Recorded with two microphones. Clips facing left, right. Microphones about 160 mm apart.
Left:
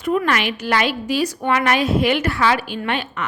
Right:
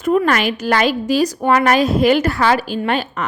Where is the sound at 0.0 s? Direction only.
40° right (ahead or behind).